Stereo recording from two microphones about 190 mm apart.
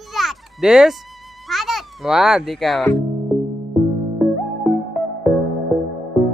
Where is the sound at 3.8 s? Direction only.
Centre (ahead or behind).